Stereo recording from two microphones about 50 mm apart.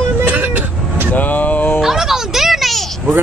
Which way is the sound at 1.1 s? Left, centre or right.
Left.